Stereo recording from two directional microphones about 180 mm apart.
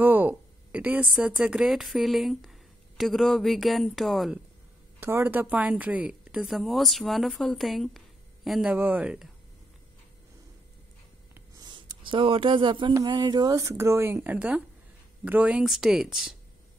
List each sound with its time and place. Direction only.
0.0 s a woman's voice: 10° right (ahead or behind)
5.0 s speech: 10° right (ahead or behind)
11.6 s speech: 25° right (ahead or behind); by 16.3 s 5° right (ahead or behind)